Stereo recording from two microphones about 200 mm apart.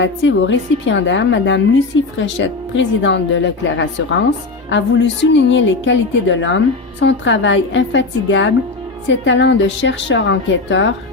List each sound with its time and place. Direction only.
0.0 s a woman's voice: 70° left (ahead or behind)